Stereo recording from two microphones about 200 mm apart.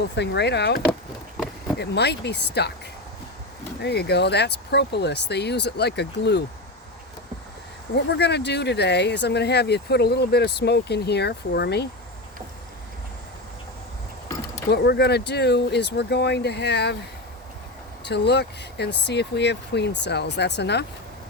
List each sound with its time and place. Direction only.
0.2 s speech: 60° left (ahead or behind)
1.8 s speech: 55° left (ahead or behind)
3.8 s speech: 55° left (ahead or behind)
7.9 s speech: 55° left (ahead or behind)
14.7 s speech: 55° left (ahead or behind)
18.0 s speech: 55° left (ahead or behind)